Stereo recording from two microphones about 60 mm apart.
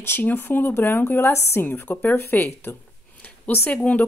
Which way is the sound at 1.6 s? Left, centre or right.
Left.